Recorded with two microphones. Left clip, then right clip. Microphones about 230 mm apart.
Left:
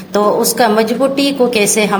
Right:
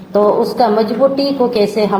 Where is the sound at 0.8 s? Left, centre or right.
Left.